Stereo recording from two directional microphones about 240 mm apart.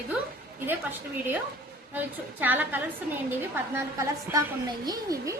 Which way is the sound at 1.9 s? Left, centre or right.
Centre.